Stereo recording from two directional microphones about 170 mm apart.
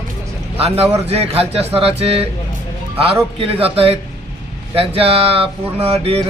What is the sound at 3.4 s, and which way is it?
Speech, 35° right (ahead or behind).